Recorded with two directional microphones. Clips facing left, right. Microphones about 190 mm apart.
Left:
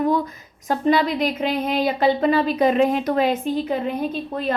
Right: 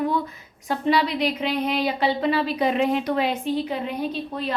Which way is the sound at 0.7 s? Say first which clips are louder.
Left 3 dB; 45° left (ahead or behind).